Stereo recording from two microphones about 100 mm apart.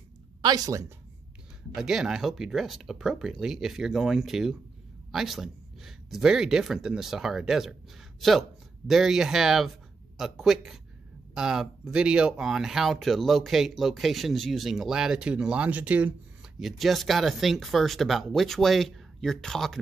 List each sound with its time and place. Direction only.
0.4 s speech: 40° right (ahead or behind)
1.8 s speech: 5° right (ahead or behind)
16.5 s speech: centre (ahead or behind)